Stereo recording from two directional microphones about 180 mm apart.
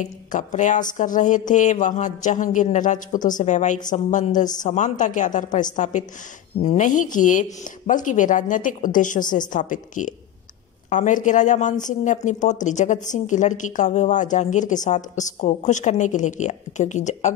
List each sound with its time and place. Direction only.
0.3 s a woman's voice: 45° left (ahead or behind)